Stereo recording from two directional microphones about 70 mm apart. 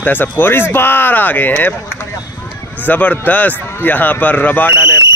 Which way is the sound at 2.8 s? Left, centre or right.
Left.